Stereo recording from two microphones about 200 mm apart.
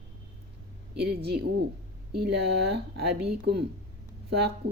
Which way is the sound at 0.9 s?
55° right (ahead or behind).